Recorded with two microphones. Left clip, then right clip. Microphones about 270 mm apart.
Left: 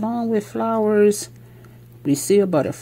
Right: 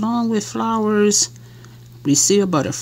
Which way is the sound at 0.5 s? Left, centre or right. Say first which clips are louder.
Left 1 dB; right.